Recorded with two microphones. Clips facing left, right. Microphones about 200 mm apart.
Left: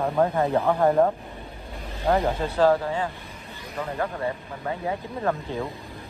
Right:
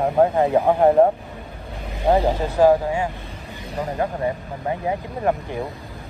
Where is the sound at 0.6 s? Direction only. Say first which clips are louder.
Right 5 dB; 30° right (ahead or behind).